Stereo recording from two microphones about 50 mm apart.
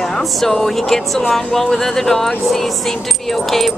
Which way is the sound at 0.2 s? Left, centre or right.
Centre.